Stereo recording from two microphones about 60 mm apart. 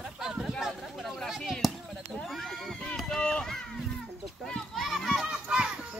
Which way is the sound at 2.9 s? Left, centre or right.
Centre.